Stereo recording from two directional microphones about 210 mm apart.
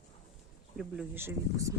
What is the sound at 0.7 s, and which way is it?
Speech, centre (ahead or behind).